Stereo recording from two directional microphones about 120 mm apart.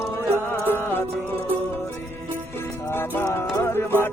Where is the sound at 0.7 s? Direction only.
20° left (ahead or behind).